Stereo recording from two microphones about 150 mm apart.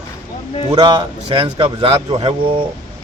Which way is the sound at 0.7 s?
30° right (ahead or behind).